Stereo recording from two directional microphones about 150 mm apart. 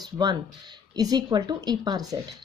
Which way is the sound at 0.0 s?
30° right (ahead or behind).